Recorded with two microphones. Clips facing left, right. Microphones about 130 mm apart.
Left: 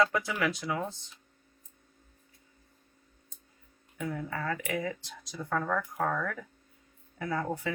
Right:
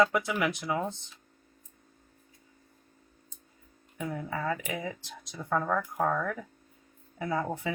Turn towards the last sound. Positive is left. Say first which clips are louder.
# right 1 dB
turn(degrees=-20)  # may be behind; listen again after turning